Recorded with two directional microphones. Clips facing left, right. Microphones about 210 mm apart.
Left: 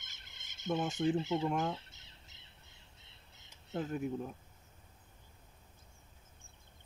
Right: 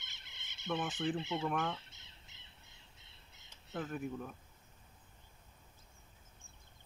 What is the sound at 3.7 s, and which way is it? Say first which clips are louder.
Speech: left 4 dB; 25° left (ahead or behind).